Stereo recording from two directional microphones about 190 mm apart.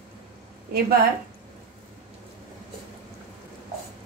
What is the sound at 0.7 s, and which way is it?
Speech, 55° right (ahead or behind).